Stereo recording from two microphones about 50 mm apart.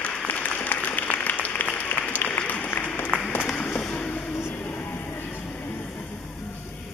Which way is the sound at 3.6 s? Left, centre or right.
Left.